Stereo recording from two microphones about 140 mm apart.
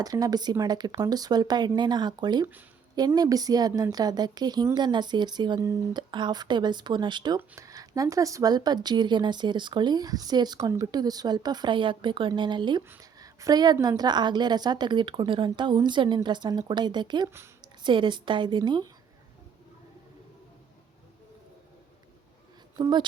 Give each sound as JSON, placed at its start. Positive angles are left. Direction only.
{"t": 0.0, "sound": "a woman's voice", "side_deg": -25}
{"t": 7.3, "sound": "a woman's voice", "side_deg": -20}
{"t": 22.7, "sound": "speech", "side_deg": -30}